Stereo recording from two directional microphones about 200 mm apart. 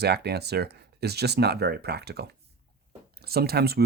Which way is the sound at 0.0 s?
55° right (ahead or behind).